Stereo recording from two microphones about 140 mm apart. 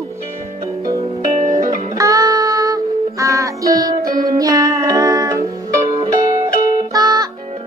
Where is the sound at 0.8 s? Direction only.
20° right (ahead or behind).